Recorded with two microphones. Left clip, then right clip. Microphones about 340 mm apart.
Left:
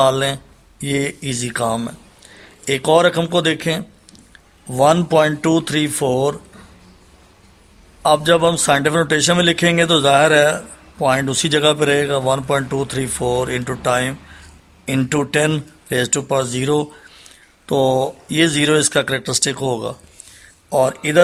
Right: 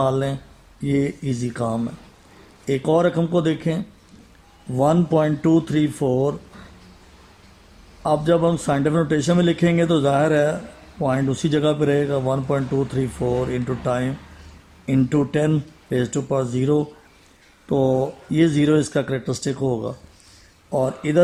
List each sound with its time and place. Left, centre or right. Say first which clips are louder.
0.0 s speech: left 6 dB; left
4.8 s speech: left 5 dB; left
8.0 s speech: left 5 dB; left
17.8 s speech: left 4 dB; left
18.3 s speech: left 2 dB; left